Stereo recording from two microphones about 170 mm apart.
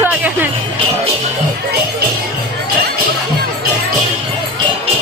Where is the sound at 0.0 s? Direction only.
10° right (ahead or behind).